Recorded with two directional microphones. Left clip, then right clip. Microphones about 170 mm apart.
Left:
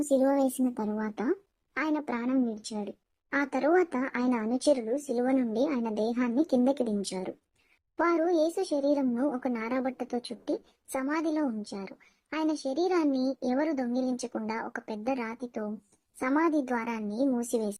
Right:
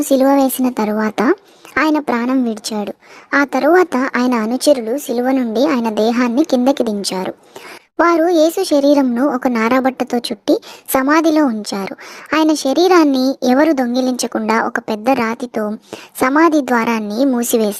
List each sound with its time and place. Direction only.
0.1 s a child's voice: 40° right (ahead or behind)